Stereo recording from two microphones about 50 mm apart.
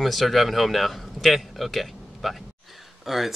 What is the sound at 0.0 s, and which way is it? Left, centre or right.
Speech, centre.